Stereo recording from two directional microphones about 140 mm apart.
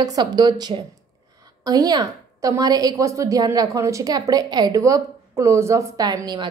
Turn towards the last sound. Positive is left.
turn(degrees=-30)  # may be behind; listen again after turning